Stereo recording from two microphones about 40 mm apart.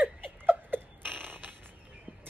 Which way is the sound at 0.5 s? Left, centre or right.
Right.